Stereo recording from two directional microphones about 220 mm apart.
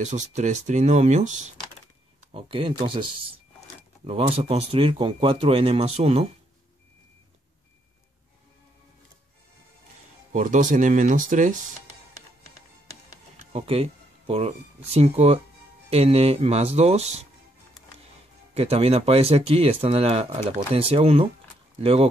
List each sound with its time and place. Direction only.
0.0 s speech: 35° right (ahead or behind)
10.3 s speech: 35° right (ahead or behind)
13.5 s speech: 25° right (ahead or behind)
18.5 s speech: 30° right (ahead or behind)